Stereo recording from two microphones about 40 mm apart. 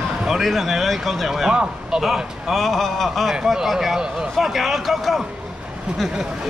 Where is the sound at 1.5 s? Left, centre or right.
Centre.